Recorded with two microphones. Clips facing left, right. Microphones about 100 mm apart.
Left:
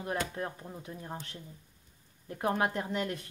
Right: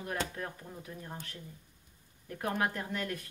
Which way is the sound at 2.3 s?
25° left (ahead or behind).